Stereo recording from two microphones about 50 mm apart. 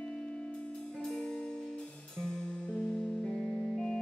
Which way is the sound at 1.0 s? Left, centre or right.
Centre.